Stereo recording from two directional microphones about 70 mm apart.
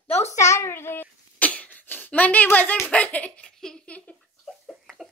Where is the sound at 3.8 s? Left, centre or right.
Centre.